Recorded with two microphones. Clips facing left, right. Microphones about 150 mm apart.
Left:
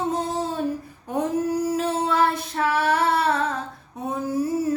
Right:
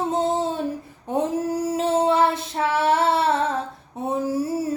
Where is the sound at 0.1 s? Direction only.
25° right (ahead or behind).